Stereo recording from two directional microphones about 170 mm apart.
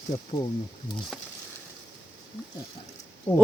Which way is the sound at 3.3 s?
35° left (ahead or behind).